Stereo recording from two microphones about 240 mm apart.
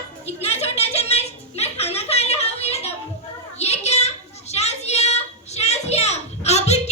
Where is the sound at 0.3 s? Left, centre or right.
Left.